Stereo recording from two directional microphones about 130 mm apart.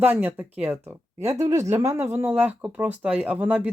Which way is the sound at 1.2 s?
55° right (ahead or behind).